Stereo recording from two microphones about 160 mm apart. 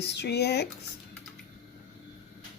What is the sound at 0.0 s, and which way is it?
Speech, 90° left.